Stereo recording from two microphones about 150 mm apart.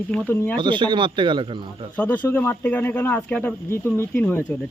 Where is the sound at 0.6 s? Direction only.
30° right (ahead or behind).